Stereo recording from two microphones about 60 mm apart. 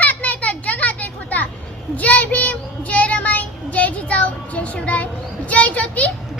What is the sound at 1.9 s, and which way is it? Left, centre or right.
Child singing, left.